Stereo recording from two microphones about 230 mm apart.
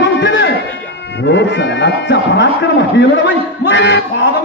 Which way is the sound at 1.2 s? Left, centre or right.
Left.